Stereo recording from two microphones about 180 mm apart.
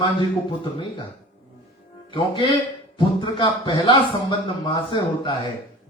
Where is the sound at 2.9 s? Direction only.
25° left (ahead or behind).